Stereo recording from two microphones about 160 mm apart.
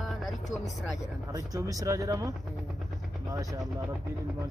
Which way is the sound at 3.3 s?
20° right (ahead or behind).